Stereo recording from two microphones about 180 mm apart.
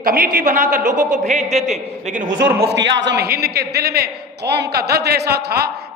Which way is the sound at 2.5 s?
70° right (ahead or behind).